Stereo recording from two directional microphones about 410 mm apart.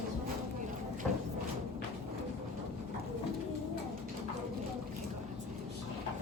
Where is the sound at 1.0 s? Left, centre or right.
Centre.